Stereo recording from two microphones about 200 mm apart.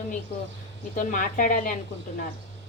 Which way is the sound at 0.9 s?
40° left (ahead or behind).